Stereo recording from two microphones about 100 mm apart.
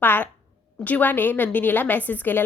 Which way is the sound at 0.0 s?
20° left (ahead or behind).